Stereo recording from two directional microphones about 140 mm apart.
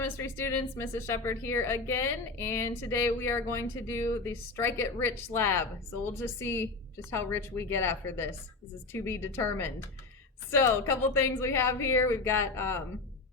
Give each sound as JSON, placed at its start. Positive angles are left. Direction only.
{"t": 0.0, "sound": "a woman's voice", "side_deg": 20}